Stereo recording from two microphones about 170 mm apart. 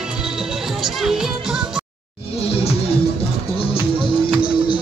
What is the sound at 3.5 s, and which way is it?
Music, 30° left (ahead or behind).